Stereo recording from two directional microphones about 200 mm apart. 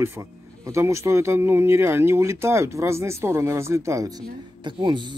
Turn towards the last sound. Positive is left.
turn(degrees=-25)  # may be behind; listen again after turning